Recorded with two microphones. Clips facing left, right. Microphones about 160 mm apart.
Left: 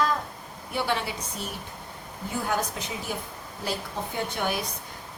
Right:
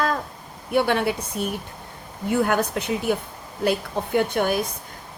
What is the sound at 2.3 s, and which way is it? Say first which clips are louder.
Speech: right 8 dB; 65° right (ahead or behind).